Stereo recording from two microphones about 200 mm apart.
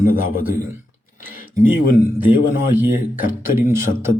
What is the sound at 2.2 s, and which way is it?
Speech, 10° right (ahead or behind).